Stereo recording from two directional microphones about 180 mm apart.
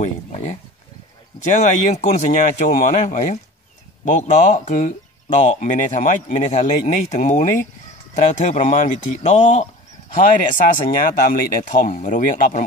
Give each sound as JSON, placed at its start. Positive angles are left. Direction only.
{"t": 1.5, "sound": "speech", "side_deg": 40}